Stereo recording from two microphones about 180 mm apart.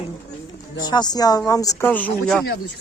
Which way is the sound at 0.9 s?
25° left (ahead or behind).